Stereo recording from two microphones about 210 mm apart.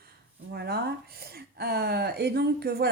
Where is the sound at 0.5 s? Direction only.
50° right (ahead or behind).